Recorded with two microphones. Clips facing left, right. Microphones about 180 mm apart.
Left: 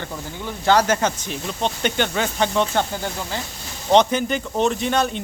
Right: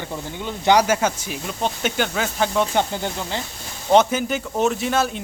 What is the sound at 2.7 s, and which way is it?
Speech, 20° right (ahead or behind).